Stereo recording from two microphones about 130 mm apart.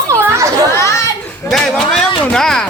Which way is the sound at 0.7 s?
20° left (ahead or behind).